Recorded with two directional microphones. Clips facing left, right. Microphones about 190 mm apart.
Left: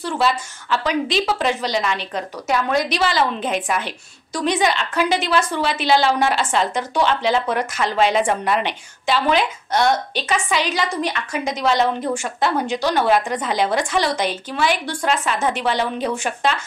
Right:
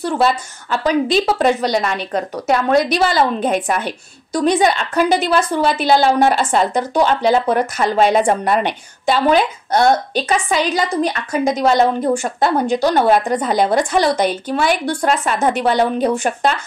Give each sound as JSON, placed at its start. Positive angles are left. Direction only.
{"t": 0.0, "sound": "a woman's voice", "side_deg": -50}
{"t": 11.4, "sound": "a woman's voice", "side_deg": -50}